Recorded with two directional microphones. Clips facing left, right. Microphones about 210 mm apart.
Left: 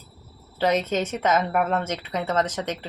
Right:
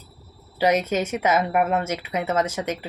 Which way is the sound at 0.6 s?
10° right (ahead or behind).